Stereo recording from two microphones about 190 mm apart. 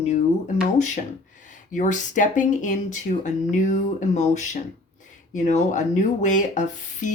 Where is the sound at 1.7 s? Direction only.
40° left (ahead or behind).